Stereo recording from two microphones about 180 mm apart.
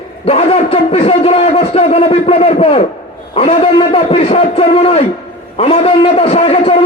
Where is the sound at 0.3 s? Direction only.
35° left (ahead or behind).